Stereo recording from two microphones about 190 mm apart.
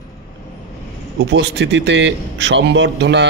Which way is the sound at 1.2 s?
70° right (ahead or behind).